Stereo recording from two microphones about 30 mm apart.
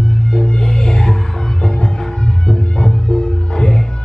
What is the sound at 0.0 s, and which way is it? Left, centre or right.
Music, left.